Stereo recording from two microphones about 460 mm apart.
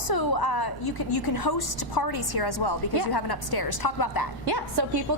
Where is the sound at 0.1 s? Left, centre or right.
Left.